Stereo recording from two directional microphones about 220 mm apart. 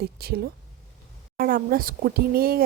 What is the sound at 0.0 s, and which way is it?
Speech, 45° right (ahead or behind).